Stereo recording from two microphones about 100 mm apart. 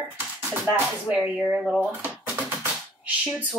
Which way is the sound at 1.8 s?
20° right (ahead or behind).